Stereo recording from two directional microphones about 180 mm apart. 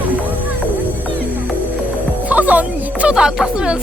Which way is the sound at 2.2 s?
10° right (ahead or behind).